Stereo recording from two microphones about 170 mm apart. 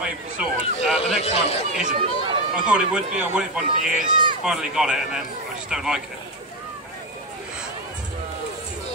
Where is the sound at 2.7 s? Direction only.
5° right (ahead or behind).